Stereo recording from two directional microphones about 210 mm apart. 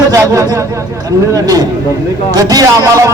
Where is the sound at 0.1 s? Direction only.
15° right (ahead or behind).